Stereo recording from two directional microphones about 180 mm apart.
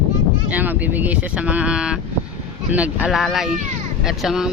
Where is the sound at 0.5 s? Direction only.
10° right (ahead or behind).